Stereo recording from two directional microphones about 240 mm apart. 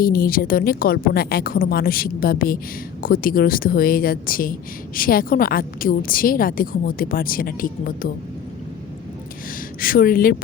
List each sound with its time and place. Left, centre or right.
0.0 s a woman's voice: left
9.8 s a woman's voice: left